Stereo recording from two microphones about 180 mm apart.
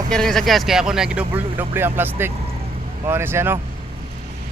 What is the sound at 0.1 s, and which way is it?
Speech, centre (ahead or behind).